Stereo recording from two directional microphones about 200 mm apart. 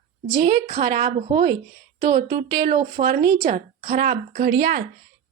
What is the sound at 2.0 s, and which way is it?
A woman's voice, 45° right (ahead or behind).